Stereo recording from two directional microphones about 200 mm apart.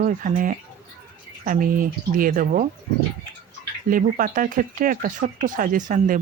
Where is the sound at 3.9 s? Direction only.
45° right (ahead or behind).